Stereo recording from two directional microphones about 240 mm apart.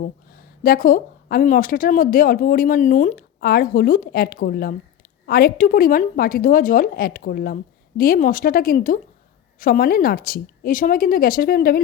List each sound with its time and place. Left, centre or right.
0.0 s speech: left